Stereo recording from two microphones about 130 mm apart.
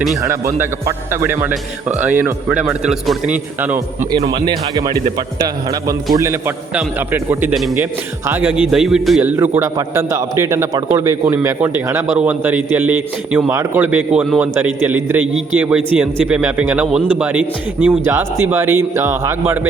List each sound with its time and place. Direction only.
0.2 s a man's voice: 20° right (ahead or behind)
2.8 s a man's voice: 5° right (ahead or behind)
4.3 s speech: 30° right (ahead or behind)
6.7 s a man's voice: 15° right (ahead or behind)
9.2 s a man's voice: 20° right (ahead or behind)